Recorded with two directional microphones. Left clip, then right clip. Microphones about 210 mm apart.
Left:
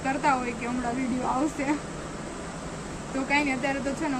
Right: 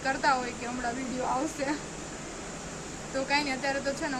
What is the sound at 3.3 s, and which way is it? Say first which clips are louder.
Speech: left 4 dB; centre (ahead or behind).